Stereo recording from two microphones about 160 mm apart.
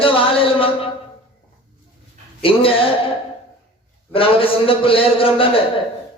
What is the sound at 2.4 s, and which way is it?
Speech, 35° left (ahead or behind).